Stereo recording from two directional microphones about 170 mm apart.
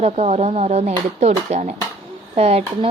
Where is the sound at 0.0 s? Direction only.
40° right (ahead or behind).